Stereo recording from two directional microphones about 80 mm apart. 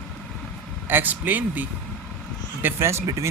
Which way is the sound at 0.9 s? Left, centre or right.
Right.